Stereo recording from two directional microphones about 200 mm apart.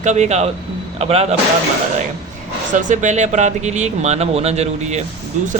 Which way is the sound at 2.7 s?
40° right (ahead or behind).